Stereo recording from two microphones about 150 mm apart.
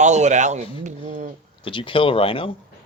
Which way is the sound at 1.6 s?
35° left (ahead or behind).